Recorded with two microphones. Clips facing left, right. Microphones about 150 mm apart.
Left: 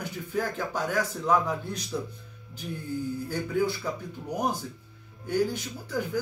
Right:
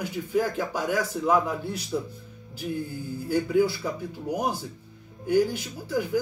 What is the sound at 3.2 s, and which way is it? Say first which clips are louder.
Speech: right 7 dB; 10° right (ahead or behind).